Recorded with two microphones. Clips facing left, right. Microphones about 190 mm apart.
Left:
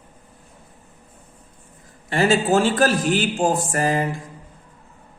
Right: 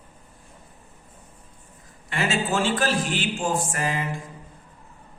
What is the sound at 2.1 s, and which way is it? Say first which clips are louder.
Speech: left 7 dB; 35° left (ahead or behind).